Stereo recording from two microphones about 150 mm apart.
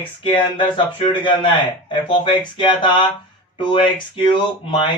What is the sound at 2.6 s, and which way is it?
Speech, 30° left (ahead or behind).